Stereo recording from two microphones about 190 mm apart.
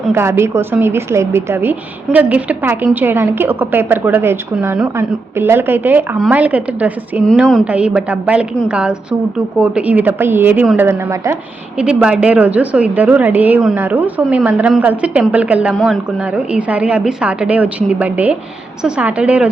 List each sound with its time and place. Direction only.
0.1 s a woman's voice: 15° right (ahead or behind)